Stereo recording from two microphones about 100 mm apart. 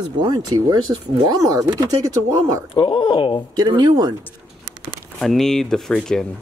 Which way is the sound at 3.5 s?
45° right (ahead or behind).